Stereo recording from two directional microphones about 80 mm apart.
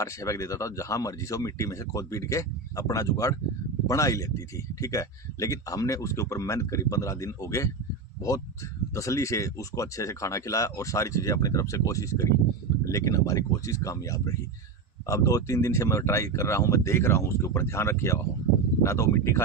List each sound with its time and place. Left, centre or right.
0.0 s speech: left
8.9 s speech: left